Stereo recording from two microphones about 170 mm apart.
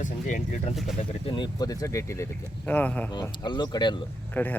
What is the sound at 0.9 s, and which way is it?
Speech, 30° left (ahead or behind).